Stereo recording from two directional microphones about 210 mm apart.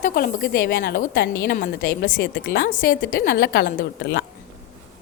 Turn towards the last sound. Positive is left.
turn(degrees=55)  # may be behind; listen again after turning